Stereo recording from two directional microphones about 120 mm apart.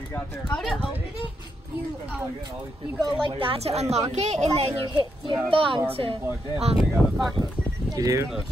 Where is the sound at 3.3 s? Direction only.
50° right (ahead or behind); by 4.5 s 65° right (ahead or behind).